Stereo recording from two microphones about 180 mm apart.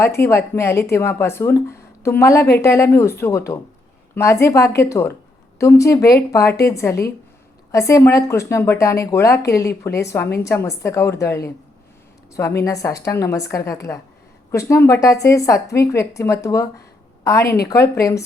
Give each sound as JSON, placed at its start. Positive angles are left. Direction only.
{"t": 0.0, "sound": "speech", "side_deg": 15}